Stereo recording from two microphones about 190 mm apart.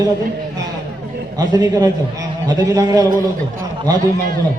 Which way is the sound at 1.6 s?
20° right (ahead or behind).